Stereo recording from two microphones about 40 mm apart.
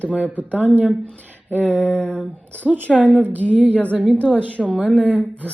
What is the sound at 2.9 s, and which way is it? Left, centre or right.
Speech, centre.